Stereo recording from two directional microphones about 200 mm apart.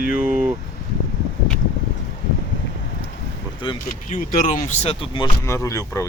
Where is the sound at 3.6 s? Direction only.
25° left (ahead or behind).